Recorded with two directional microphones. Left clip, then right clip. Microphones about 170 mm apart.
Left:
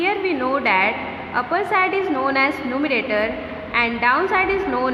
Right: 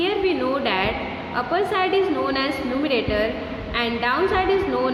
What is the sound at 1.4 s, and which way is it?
A woman's voice, 30° left (ahead or behind).